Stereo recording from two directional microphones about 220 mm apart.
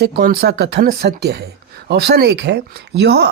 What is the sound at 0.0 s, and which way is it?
Speech, 45° right (ahead or behind).